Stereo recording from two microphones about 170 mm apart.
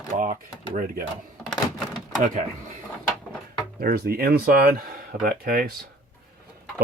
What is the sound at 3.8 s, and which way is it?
Speech, 60° right (ahead or behind).